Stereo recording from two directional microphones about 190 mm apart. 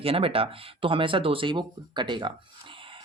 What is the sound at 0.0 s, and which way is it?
Speech, 30° right (ahead or behind).